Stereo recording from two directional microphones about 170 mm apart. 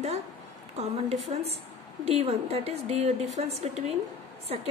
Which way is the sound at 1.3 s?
35° right (ahead or behind).